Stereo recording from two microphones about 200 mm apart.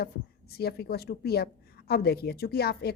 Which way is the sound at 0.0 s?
50° left (ahead or behind).